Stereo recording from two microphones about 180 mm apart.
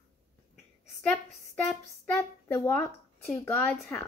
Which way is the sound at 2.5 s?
10° left (ahead or behind).